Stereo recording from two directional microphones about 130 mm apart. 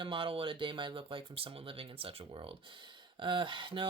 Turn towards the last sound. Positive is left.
turn(degrees=-40)  # may be behind; listen again after turning